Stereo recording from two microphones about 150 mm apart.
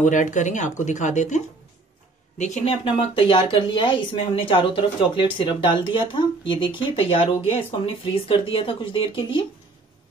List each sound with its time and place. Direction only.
0.0 s speech: 55° left (ahead or behind); by 9.5 s 35° left (ahead or behind)